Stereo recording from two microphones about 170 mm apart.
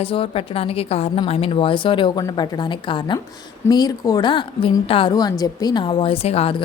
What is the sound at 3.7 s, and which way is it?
A woman's voice, 20° left (ahead or behind).